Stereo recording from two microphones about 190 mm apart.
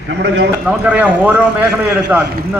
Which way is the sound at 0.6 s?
5° right (ahead or behind).